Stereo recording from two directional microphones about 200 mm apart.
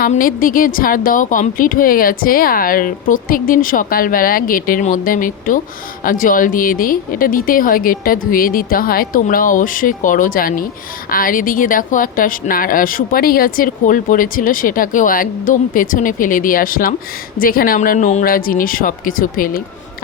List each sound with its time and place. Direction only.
0.0 s speech: 45° left (ahead or behind)